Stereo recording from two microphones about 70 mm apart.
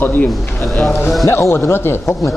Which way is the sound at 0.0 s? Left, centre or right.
Left.